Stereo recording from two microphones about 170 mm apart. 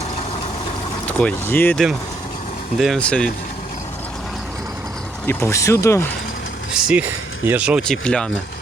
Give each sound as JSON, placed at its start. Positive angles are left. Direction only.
{"t": 1.2, "sound": "speech", "side_deg": 10}
{"t": 2.7, "sound": "speech", "side_deg": 0}
{"t": 5.2, "sound": "speech", "side_deg": 15}
{"t": 6.7, "sound": "speech", "side_deg": -5}